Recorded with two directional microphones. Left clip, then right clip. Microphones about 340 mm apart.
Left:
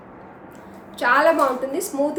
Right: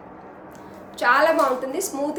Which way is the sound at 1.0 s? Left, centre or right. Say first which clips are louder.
Left 1 dB; centre.